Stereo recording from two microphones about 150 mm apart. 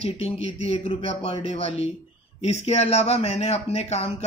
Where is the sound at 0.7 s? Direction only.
40° left (ahead or behind).